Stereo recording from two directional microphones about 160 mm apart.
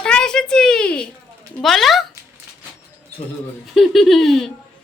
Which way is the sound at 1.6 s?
Centre (ahead or behind).